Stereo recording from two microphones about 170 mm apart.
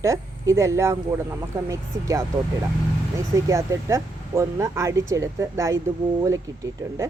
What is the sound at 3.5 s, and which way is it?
Speech, 15° right (ahead or behind).